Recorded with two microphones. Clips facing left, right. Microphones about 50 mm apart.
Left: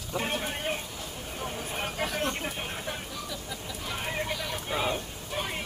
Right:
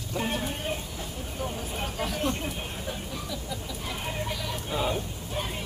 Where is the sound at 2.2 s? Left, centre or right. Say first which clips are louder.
Right 1 dB; left.